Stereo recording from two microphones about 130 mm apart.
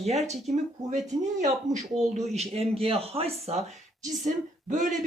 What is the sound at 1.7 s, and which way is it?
Speech, 75° right (ahead or behind).